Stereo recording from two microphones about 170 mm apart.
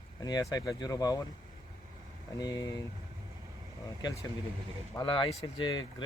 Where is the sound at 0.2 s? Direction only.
20° left (ahead or behind).